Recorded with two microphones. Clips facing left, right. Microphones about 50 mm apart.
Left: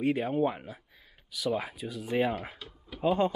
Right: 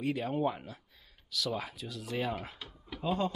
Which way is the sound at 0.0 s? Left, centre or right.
Left.